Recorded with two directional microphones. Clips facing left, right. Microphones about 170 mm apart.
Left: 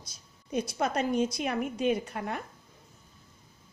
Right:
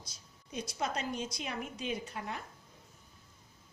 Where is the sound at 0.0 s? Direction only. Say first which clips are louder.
Left 1 dB; 55° left (ahead or behind).